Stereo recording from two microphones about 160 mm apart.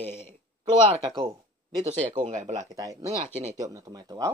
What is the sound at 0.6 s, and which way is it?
Speech, 35° right (ahead or behind).